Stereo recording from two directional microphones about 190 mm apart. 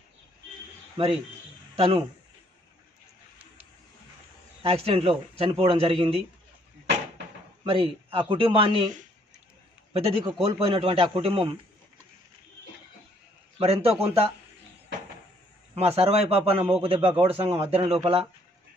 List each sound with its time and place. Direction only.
1.8 s a man's voice: 30° right (ahead or behind)
4.6 s a man's voice: 30° right (ahead or behind)
7.6 s a man's voice: 30° right (ahead or behind)
9.9 s a man's voice: 30° right (ahead or behind)
13.6 s a man's voice: 30° right (ahead or behind)
15.7 s a man's voice: 30° right (ahead or behind)